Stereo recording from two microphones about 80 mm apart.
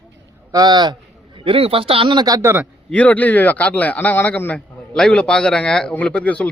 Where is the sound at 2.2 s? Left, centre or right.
Right.